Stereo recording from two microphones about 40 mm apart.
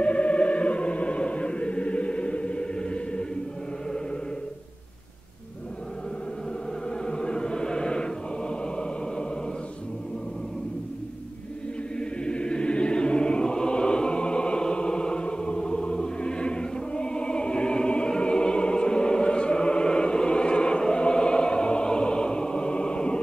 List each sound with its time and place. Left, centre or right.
0.0 s choir: left
7.1 s chant: left
12.0 s chant: left